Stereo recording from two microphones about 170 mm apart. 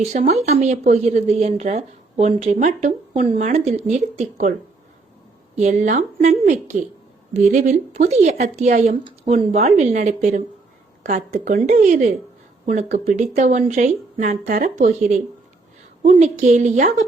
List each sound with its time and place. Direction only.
0.0 s speech: 40° right (ahead or behind)
5.5 s speech: 45° right (ahead or behind)